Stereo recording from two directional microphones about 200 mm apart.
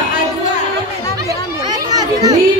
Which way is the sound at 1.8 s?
20° right (ahead or behind).